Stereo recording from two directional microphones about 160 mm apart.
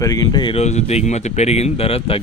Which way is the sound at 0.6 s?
45° left (ahead or behind).